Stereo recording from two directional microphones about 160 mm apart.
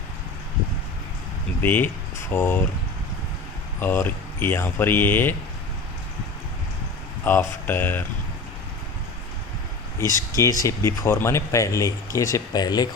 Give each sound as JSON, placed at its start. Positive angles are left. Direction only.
{"t": 1.6, "sound": "speech", "side_deg": 15}
{"t": 3.8, "sound": "speech", "side_deg": 10}
{"t": 7.3, "sound": "speech", "side_deg": 15}
{"t": 10.3, "sound": "speech", "side_deg": 20}